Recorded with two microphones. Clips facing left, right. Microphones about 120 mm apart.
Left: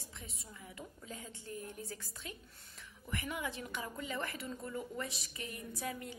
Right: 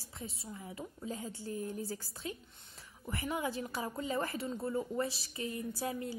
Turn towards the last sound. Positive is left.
turn(degrees=-30)  # may be behind; listen again after turning